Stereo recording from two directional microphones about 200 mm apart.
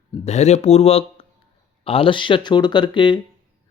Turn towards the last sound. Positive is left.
turn(degrees=25)  # may be behind; listen again after turning